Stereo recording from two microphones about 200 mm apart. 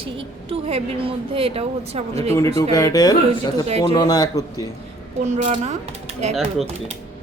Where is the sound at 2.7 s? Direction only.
20° left (ahead or behind).